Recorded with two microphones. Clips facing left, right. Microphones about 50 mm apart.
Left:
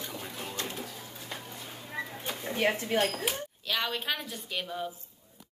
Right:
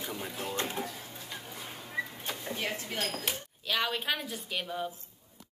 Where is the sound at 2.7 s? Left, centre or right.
Left.